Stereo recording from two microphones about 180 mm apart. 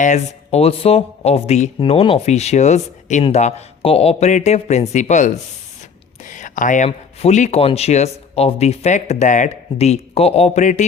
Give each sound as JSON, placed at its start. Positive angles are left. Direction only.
{"t": 0.0, "sound": "speech", "side_deg": 40}